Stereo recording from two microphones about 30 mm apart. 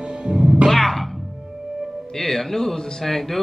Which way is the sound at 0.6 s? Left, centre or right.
Centre.